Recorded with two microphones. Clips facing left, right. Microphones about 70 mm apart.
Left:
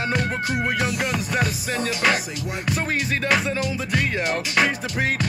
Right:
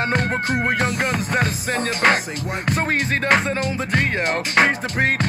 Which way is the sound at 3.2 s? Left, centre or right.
Right.